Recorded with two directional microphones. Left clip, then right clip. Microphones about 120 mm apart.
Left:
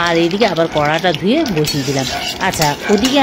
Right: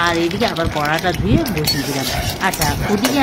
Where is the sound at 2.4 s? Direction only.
70° left (ahead or behind).